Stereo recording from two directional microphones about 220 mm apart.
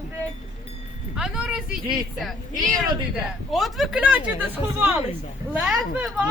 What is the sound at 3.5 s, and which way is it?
Speech, centre (ahead or behind).